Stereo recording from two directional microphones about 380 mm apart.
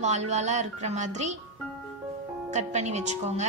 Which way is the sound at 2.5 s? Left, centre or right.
Centre.